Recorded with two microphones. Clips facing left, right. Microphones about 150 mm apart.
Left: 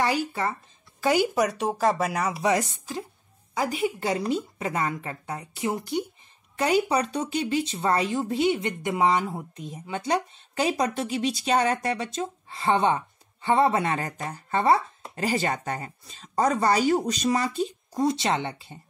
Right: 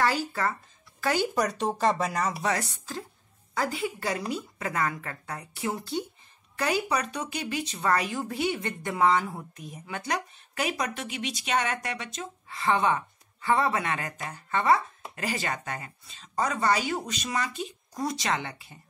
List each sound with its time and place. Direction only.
0.0 s speech: 20° left (ahead or behind)